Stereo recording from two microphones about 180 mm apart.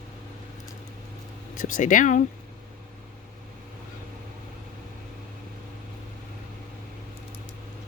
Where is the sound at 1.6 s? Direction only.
45° left (ahead or behind).